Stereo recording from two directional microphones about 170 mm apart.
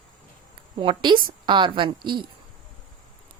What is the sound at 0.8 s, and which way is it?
A woman's voice, 30° right (ahead or behind).